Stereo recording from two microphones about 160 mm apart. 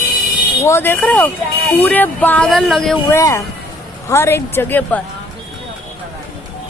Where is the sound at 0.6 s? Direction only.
15° left (ahead or behind).